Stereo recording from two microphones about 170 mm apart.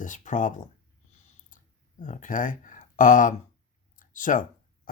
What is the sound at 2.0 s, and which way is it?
Speech, 50° left (ahead or behind).